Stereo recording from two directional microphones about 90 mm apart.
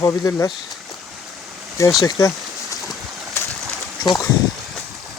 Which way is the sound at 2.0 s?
35° left (ahead or behind).